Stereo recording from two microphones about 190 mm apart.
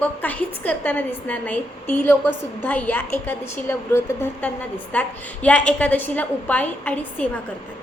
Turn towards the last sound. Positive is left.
turn(degrees=10)  # may be behind; listen again after turning